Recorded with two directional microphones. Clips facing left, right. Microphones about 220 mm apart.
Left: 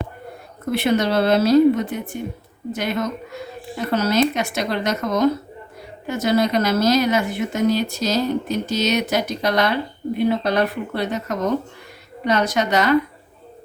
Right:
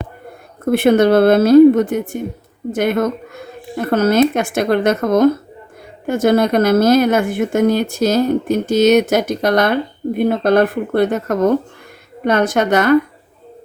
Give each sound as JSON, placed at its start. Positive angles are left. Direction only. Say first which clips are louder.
{"t": 0.6, "sound": "speech", "louder": "right 8 dB", "side_deg": -50}